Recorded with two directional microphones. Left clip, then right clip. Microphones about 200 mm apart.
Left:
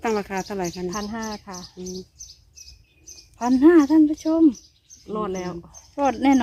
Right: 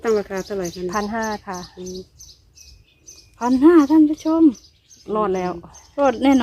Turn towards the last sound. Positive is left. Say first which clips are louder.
# right 3 dB
turn(degrees=0)  # may be behind; listen again after turning